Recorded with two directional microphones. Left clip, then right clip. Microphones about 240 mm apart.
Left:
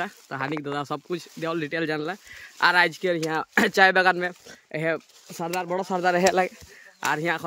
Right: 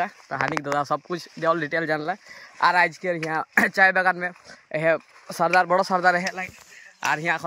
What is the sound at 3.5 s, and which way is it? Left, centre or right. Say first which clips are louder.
Speech: even; centre.